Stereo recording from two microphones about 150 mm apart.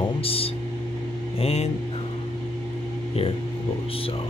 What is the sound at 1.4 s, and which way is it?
Speech, 45° left (ahead or behind).